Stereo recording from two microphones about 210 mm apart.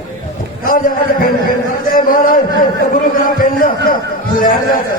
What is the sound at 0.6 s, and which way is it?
A man's voice, 45° left (ahead or behind).